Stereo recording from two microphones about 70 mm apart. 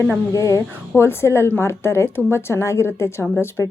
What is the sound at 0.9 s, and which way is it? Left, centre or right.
Speech, left.